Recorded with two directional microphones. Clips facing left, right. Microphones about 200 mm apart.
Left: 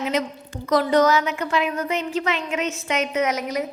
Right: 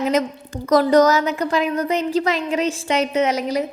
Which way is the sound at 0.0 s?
45° right (ahead or behind).